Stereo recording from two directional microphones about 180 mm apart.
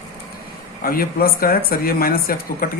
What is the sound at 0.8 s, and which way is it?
Speech, 55° left (ahead or behind).